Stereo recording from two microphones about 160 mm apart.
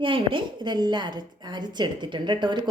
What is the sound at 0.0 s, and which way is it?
A woman's voice, 35° right (ahead or behind).